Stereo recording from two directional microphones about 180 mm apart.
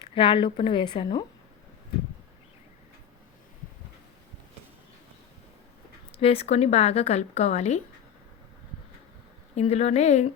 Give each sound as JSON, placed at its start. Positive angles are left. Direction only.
{"t": 0.0, "sound": "a woman's voice", "side_deg": 30}
{"t": 6.1, "sound": "a woman's voice", "side_deg": 35}
{"t": 9.6, "sound": "a woman's voice", "side_deg": 35}